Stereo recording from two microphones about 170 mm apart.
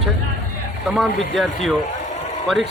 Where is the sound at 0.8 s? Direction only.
Centre (ahead or behind).